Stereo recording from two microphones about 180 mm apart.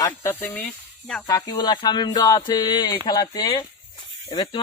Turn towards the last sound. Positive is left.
turn(degrees=25)  # may be behind; listen again after turning